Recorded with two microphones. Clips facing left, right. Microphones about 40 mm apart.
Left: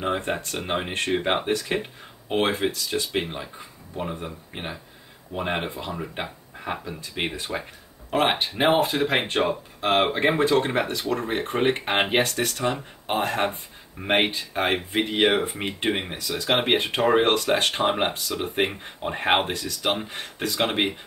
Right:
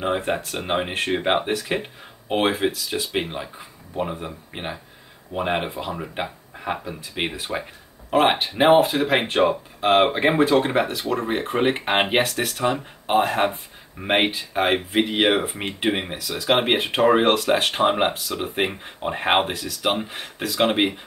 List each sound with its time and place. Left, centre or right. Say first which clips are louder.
0.0 s speech: right 3 dB; centre